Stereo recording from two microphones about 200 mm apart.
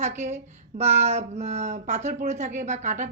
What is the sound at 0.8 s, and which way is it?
Speech, 35° right (ahead or behind).